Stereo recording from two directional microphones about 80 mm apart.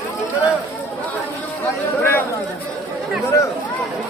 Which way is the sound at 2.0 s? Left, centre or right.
Left.